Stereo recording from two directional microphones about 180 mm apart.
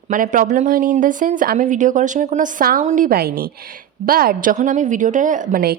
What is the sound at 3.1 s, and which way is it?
A woman's voice, 55° right (ahead or behind).